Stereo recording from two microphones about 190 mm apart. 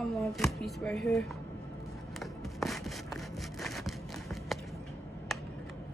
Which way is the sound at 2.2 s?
Centre (ahead or behind).